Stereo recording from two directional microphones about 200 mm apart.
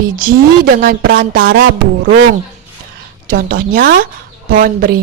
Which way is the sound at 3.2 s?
50° right (ahead or behind).